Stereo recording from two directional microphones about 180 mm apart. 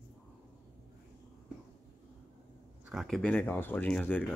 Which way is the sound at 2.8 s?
Centre (ahead or behind).